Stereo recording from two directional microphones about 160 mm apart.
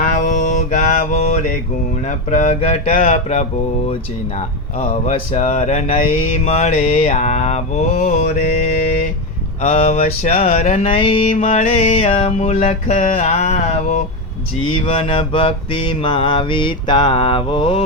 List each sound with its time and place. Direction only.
0.3 s mantra: 50° left (ahead or behind)
5.3 s mantra: 45° left (ahead or behind)
9.6 s mantra: 40° left (ahead or behind)
14.7 s mantra: 35° left (ahead or behind)